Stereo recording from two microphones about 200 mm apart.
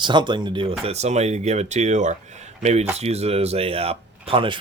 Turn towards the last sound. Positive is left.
turn(degrees=-25)  # may be behind; listen again after turning